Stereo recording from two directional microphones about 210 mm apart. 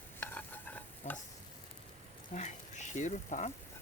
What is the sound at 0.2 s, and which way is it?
Stir, 10° left (ahead or behind).